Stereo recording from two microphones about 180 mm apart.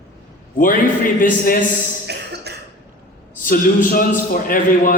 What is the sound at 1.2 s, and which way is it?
Speech, 50° left (ahead or behind).